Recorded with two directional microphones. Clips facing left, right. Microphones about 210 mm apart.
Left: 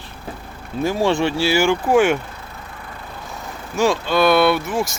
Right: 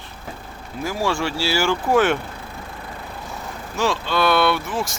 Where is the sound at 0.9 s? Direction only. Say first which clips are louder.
Left 5 dB; 25° left (ahead or behind).